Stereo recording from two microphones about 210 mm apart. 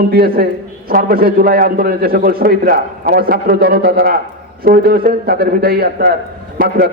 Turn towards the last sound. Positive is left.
turn(degrees=-45)  # may be behind; listen again after turning